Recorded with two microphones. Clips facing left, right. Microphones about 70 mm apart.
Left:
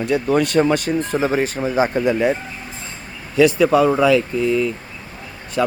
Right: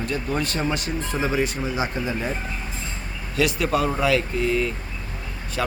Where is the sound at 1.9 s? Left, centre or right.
Left.